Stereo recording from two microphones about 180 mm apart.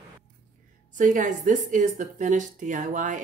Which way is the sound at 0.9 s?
45° right (ahead or behind).